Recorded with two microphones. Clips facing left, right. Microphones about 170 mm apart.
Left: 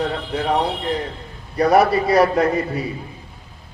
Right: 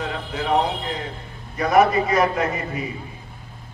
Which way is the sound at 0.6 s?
35° left (ahead or behind).